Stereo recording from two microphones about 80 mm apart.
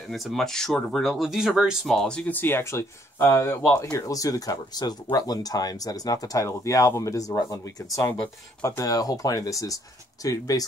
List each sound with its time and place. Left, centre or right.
0.1 s speech: centre
1.9 s speech: centre
2.3 s speech: left
3.9 s speech: left